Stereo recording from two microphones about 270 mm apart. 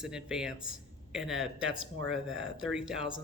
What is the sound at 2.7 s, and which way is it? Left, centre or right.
Speech, centre.